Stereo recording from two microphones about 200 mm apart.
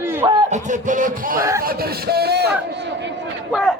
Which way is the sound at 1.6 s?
50° right (ahead or behind).